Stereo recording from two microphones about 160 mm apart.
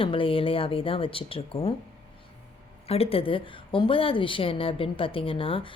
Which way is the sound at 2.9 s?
35° left (ahead or behind).